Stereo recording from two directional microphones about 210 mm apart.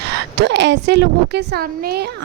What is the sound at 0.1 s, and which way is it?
A woman's voice, 55° right (ahead or behind).